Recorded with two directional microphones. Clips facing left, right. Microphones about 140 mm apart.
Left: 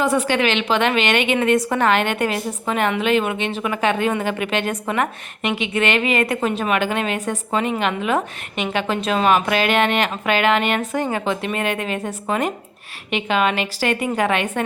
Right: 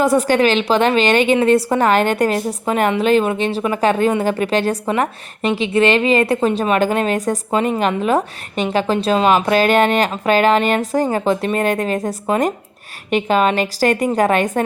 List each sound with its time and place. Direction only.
0.0 s a woman's voice: 40° right (ahead or behind)